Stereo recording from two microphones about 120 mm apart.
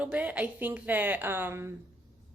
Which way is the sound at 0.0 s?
10° right (ahead or behind).